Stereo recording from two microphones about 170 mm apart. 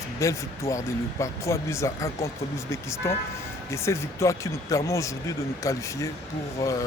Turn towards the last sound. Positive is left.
turn(degrees=20)  # may be behind; listen again after turning